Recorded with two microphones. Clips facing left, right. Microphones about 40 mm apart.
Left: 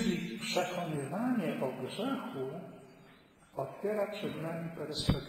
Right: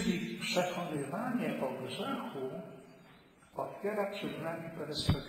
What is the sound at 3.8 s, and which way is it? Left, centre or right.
A man's voice, centre.